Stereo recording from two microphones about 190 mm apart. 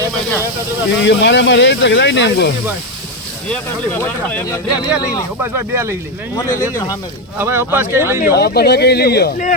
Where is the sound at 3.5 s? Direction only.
10° left (ahead or behind).